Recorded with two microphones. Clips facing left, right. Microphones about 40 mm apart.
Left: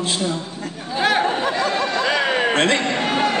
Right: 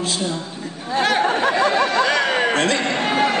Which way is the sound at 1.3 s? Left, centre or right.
Right.